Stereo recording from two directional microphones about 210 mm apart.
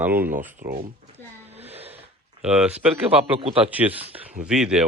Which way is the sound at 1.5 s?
30° right (ahead or behind).